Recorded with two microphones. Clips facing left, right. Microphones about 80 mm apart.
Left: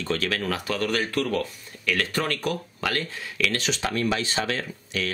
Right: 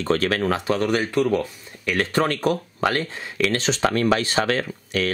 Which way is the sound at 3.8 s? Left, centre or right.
Right.